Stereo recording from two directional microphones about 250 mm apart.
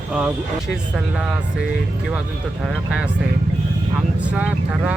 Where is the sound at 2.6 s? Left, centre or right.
Centre.